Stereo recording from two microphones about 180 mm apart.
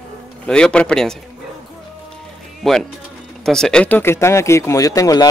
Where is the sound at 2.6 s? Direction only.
Centre (ahead or behind).